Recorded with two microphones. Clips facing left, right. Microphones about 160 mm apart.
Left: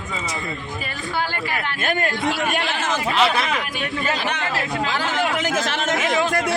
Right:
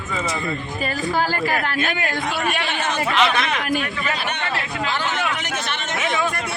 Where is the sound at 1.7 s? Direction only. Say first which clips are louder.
Left 1 dB; 50° left (ahead or behind).